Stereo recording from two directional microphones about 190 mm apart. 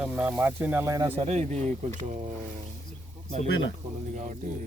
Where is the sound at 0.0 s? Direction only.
5° right (ahead or behind).